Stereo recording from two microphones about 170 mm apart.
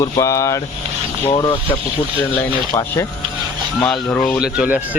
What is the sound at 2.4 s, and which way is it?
Speech, 15° left (ahead or behind).